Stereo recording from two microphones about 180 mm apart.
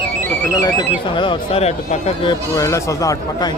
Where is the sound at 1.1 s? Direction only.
25° left (ahead or behind).